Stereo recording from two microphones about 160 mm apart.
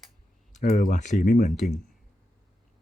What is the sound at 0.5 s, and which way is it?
Speech, 50° left (ahead or behind).